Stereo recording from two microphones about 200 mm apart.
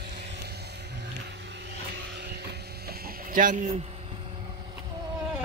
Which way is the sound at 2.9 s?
45° right (ahead or behind).